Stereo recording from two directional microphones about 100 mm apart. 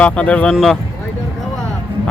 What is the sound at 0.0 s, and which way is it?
Speech, 15° left (ahead or behind).